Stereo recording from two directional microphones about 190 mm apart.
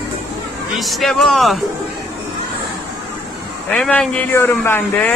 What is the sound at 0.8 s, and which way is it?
Speech, centre (ahead or behind).